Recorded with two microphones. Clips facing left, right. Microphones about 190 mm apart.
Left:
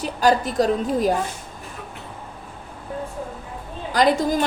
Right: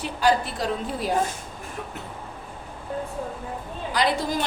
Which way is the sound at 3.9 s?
45° left (ahead or behind).